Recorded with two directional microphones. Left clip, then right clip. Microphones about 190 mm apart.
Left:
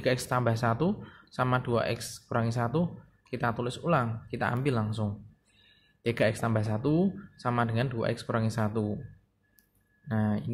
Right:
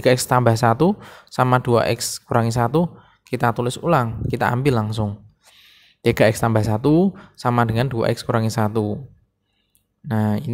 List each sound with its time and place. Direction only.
0.0 s speech: 50° right (ahead or behind)
10.0 s speech: 50° right (ahead or behind)